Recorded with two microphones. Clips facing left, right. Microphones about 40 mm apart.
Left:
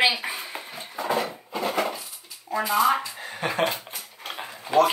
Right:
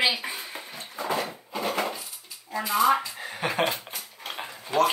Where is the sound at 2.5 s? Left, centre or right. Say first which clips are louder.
Left 1 dB; centre.